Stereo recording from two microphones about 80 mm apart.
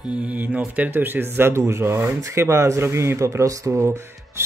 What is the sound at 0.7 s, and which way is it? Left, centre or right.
Speech, right.